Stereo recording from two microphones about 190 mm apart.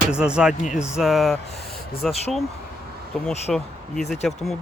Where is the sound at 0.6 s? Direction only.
40° left (ahead or behind).